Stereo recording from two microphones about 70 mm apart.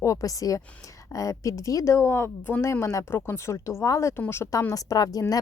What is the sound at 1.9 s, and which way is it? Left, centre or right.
Speech, left.